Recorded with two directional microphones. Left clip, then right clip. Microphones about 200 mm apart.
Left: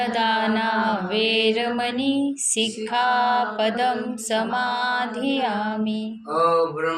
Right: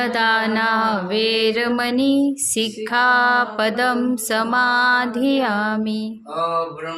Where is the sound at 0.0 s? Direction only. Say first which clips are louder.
Right 3 dB; 35° right (ahead or behind).